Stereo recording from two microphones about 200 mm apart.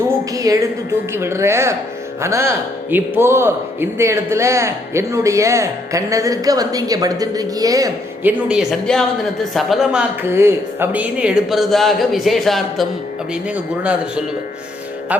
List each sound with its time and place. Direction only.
0.3 s a woman's voice: 15° right (ahead or behind); by 12.9 s centre (ahead or behind)
15.1 s speech: 5° right (ahead or behind)